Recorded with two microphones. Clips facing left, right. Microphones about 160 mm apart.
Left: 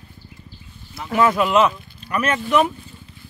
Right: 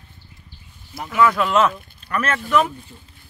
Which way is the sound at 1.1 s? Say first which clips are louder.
Even; 30° left (ahead or behind).